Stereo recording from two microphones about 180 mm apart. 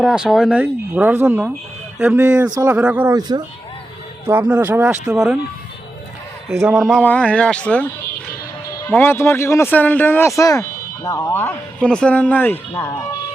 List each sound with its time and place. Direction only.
0.0 s speech: centre (ahead or behind)
3.2 s speech: 25° right (ahead or behind)
4.3 s speech: 10° right (ahead or behind)
6.5 s speech: 15° right (ahead or behind)
6.7 s speech: 5° right (ahead or behind)
7.0 s speech: 10° left (ahead or behind)
8.9 s speech: 10° left (ahead or behind)